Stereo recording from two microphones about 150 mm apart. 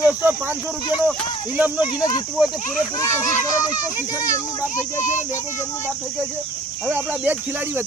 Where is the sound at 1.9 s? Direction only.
25° left (ahead or behind).